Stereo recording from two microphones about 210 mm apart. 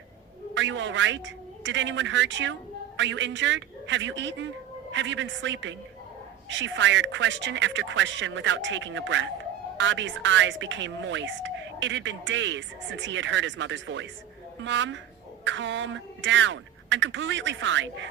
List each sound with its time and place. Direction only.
0.5 s a woman's voice: 60° right (ahead or behind)